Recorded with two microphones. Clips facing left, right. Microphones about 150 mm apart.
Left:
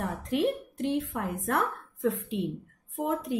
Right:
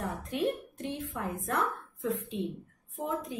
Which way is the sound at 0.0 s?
85° left.